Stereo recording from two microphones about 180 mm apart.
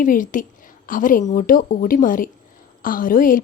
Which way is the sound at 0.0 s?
50° left (ahead or behind).